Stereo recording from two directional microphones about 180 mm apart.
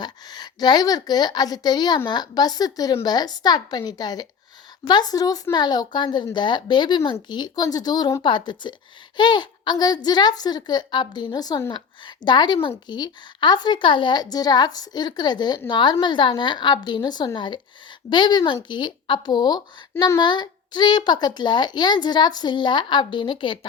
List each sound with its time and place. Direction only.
0.0 s a woman's voice: 25° left (ahead or behind)